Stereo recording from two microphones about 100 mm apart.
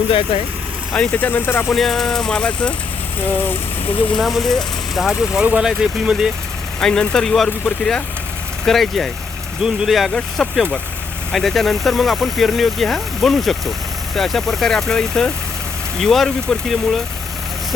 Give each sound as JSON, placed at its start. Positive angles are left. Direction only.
{"t": 0.1, "sound": "speech", "side_deg": 70}
{"t": 0.9, "sound": "speech", "side_deg": 15}
{"t": 1.7, "sound": "speech", "side_deg": 5}
{"t": 4.1, "sound": "speech", "side_deg": 0}
{"t": 6.7, "sound": "speech", "side_deg": 5}